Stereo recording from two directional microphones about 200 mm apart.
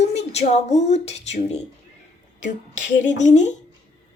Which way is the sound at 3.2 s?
35° left (ahead or behind).